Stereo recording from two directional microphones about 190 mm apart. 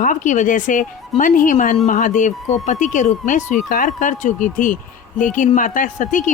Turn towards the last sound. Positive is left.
turn(degrees=40)  # may be behind; listen again after turning